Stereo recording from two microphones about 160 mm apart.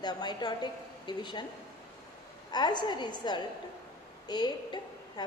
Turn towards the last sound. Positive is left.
turn(degrees=25)  # may be behind; listen again after turning